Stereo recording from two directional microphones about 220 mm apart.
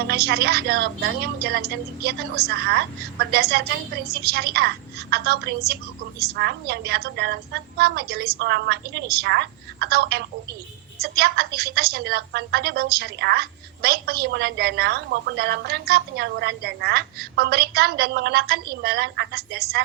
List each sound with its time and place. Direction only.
0.1 s a woman's voice: 45° right (ahead or behind)